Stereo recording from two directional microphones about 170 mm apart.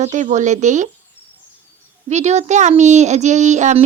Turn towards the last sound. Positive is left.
turn(degrees=-45)  # may be behind; listen again after turning